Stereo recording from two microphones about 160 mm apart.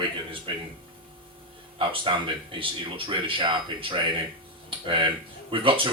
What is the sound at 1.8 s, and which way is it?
Speech, 30° right (ahead or behind).